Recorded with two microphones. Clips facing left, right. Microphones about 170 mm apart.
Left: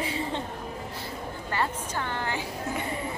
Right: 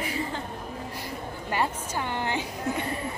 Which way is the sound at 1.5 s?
15° right (ahead or behind).